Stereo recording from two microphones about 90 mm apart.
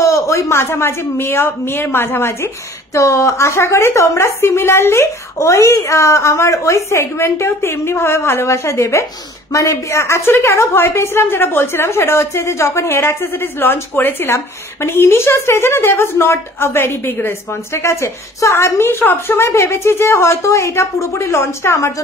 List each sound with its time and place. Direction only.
0.0 s a woman's voice: 35° left (ahead or behind)